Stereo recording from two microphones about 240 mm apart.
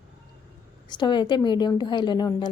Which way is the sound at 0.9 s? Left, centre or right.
Centre.